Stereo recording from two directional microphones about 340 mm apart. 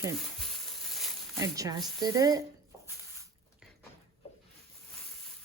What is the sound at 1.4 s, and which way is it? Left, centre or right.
Speech, centre.